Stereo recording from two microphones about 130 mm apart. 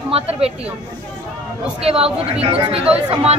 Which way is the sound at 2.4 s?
45° right (ahead or behind).